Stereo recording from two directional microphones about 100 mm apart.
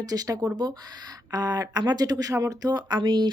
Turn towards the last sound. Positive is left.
turn(degrees=-45)  # may be behind; listen again after turning